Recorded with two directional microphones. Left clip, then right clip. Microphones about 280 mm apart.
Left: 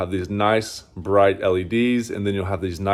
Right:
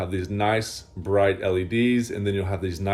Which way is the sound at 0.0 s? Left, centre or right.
Left.